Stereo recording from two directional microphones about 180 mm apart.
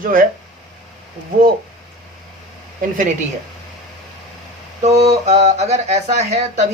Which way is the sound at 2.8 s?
50° right (ahead or behind).